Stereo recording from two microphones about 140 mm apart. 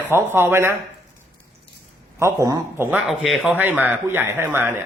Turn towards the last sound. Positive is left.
turn(degrees=-15)  # may be behind; listen again after turning